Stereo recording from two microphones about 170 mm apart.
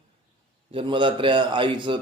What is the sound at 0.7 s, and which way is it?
A man's voice, 30° right (ahead or behind).